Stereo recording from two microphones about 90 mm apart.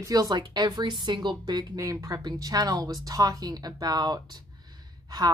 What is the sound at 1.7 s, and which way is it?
Speech, 40° right (ahead or behind).